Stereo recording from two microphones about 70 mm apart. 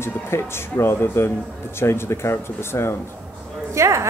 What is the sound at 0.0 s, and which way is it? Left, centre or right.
Speech, left.